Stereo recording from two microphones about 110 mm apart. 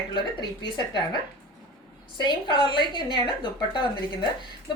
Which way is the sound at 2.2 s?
45° left (ahead or behind).